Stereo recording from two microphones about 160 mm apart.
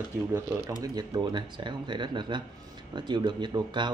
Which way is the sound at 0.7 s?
25° right (ahead or behind).